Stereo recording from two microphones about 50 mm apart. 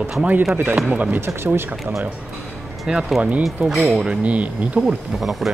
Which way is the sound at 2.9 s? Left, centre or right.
Centre.